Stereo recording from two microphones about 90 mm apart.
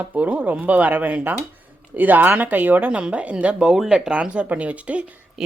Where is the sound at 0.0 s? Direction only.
20° right (ahead or behind).